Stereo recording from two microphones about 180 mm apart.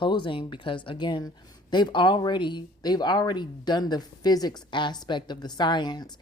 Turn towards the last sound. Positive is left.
turn(degrees=20)  # may be behind; listen again after turning